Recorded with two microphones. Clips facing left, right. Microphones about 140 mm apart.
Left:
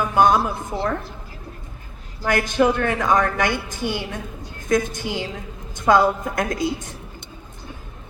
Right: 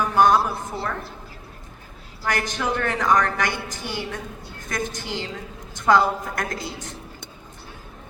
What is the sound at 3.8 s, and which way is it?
A woman's voice, 20° left (ahead or behind).